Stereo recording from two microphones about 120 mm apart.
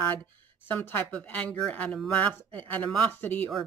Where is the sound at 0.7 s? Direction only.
15° left (ahead or behind).